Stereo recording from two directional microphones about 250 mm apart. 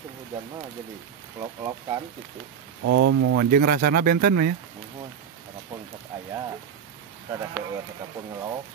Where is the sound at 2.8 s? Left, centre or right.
Right.